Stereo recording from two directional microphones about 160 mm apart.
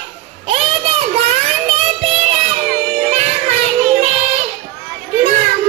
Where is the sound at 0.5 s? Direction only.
40° right (ahead or behind).